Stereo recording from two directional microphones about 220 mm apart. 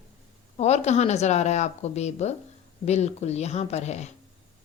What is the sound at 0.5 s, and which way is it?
A woman's voice, 30° left (ahead or behind).